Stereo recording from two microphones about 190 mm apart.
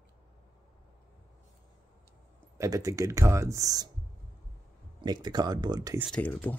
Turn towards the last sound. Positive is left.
turn(degrees=10)  # may be behind; listen again after turning